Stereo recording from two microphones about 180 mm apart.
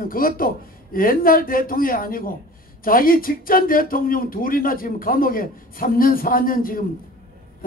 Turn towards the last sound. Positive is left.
turn(degrees=50)  # may be behind; listen again after turning